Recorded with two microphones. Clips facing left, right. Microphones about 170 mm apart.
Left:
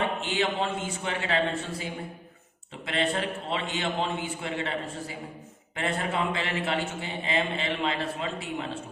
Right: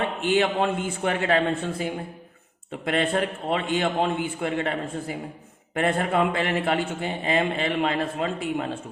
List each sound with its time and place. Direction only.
0.2 s a man's voice: 50° right (ahead or behind)